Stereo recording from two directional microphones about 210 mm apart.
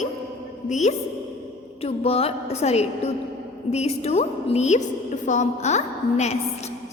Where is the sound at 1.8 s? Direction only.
30° left (ahead or behind).